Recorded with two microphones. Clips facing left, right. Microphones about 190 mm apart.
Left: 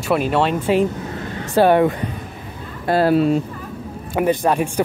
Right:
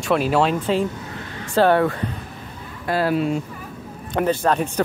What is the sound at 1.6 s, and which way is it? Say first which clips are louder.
Speech: left 3 dB; 15° left (ahead or behind).